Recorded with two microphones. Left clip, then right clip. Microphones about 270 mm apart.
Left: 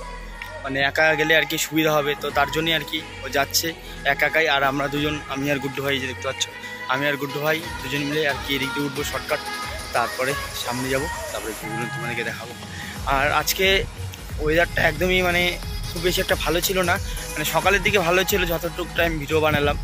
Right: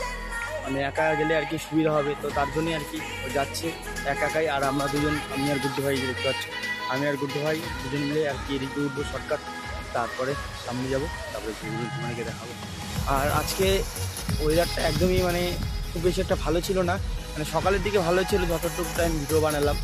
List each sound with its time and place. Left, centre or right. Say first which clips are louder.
0.7 s speech: left 6 dB; centre
4.0 s speech: left 6 dB; centre
5.9 s speech: left 3 dB; right
6.9 s speech: left 6 dB; centre
13.1 s speech: left 5 dB; centre